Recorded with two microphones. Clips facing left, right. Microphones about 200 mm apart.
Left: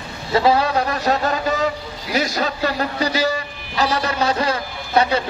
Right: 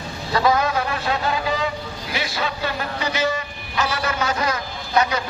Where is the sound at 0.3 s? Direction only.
30° left (ahead or behind).